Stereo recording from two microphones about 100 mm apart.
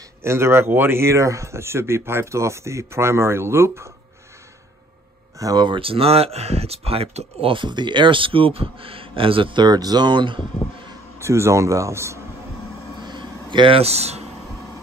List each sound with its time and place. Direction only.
0.2 s speech: 25° right (ahead or behind)
5.4 s speech: 40° right (ahead or behind)
5.8 s speech: 70° right (ahead or behind); by 11.0 s 55° right (ahead or behind)
11.1 s speech: 25° right (ahead or behind)
13.0 s a sound: 50° right (ahead or behind)
13.7 s speech: 90° right